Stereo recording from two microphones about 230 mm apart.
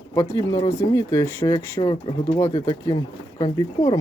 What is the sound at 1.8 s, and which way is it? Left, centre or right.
Speech, left.